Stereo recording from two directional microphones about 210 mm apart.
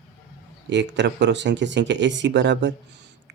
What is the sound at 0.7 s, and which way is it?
Speech, 55° right (ahead or behind).